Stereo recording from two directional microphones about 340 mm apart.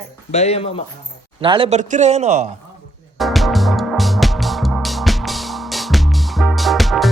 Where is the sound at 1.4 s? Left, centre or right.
Centre.